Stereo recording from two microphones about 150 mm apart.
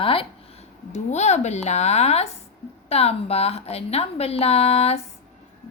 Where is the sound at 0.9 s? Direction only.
50° left (ahead or behind).